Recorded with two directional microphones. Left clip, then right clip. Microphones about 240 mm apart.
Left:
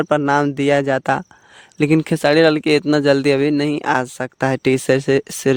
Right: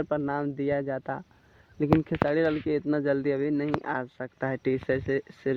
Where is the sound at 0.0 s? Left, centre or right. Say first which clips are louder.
Left 13 dB; left.